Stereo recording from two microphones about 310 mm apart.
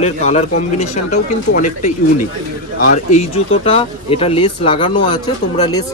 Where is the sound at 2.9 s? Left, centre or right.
Left.